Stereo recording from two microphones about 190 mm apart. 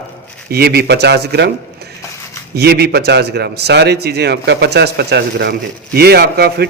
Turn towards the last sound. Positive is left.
turn(degrees=-55)  # may be behind; listen again after turning